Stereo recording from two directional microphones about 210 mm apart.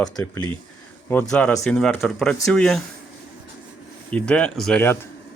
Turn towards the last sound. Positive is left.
turn(degrees=10)  # may be behind; listen again after turning